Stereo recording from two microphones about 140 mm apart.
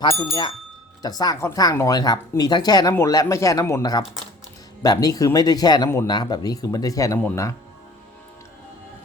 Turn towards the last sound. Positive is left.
turn(degrees=20)  # may be behind; listen again after turning